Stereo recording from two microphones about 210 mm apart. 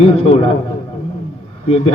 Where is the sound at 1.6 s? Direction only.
30° left (ahead or behind).